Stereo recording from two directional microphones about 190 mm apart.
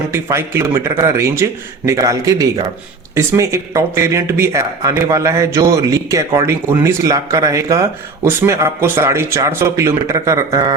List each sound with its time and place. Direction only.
0.1 s speech: 15° right (ahead or behind)